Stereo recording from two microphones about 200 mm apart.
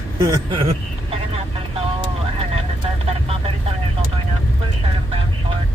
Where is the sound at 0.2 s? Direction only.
20° right (ahead or behind).